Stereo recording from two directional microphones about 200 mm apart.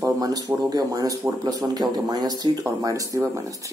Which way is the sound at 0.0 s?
15° right (ahead or behind).